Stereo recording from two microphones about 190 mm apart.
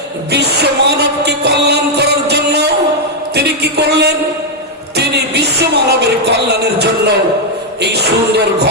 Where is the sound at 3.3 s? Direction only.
60° right (ahead or behind).